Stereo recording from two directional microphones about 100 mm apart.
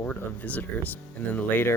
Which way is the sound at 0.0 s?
15° left (ahead or behind).